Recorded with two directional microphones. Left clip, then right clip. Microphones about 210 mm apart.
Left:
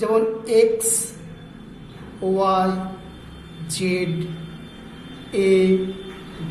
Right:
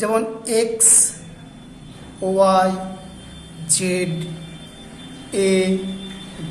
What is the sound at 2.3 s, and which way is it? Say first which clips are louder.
A woman's voice: right 4 dB; 30° right (ahead or behind).